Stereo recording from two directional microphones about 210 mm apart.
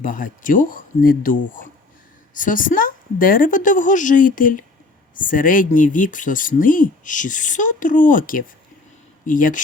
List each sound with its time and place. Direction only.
0.0 s speech: 40° left (ahead or behind)